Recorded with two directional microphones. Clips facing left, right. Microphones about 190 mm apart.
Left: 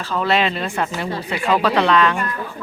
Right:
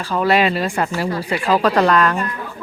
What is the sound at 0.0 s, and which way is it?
Speech, 10° right (ahead or behind).